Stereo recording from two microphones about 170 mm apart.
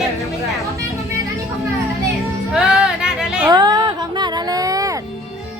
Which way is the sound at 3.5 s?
25° right (ahead or behind).